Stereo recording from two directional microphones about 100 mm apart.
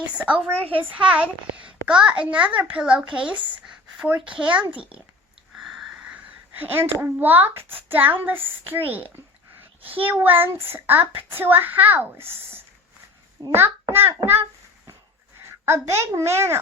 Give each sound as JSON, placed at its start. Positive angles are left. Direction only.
{"t": 0.0, "sound": "a child's voice", "side_deg": -10}
{"t": 5.5, "sound": "sniff", "side_deg": -5}
{"t": 6.5, "sound": "speech", "side_deg": -20}
{"t": 15.4, "sound": "a woman's voice", "side_deg": -25}